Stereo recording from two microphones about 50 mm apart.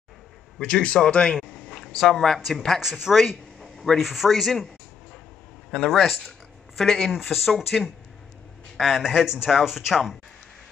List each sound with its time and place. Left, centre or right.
0.6 s a man's voice: centre
1.5 s a sound: centre
2.0 s a woman's voice: centre
2.8 s speech: centre
3.6 s a man's voice: centre
5.9 s a man's voice: centre
7.1 s a woman's voice: centre